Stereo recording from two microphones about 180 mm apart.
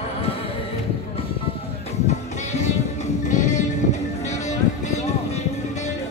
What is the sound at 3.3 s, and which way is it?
Music, 40° left (ahead or behind).